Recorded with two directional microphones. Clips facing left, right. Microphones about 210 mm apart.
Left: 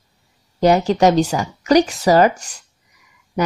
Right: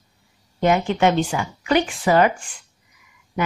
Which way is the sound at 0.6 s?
35° left (ahead or behind).